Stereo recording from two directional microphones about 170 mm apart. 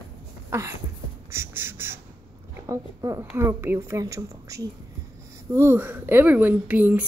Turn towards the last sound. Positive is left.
turn(degrees=-10)  # may be behind; listen again after turning